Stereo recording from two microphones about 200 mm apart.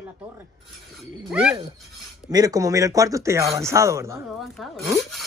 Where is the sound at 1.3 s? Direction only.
5° right (ahead or behind).